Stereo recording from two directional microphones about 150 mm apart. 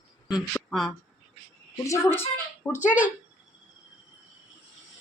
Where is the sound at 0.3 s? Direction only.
Centre (ahead or behind).